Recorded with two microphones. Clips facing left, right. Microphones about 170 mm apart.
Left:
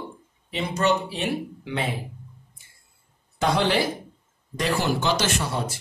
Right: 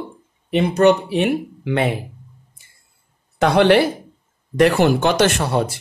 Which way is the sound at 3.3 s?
65° right (ahead or behind).